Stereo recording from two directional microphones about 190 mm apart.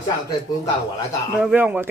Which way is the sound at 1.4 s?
5° right (ahead or behind).